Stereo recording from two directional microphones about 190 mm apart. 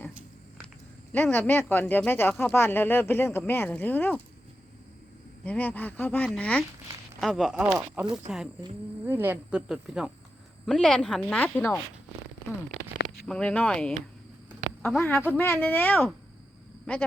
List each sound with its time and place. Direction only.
1.1 s speech: 10° left (ahead or behind)
5.5 s speech: 10° left (ahead or behind)
13.2 s speech: 5° left (ahead or behind)
16.8 s a sound: 5° left (ahead or behind)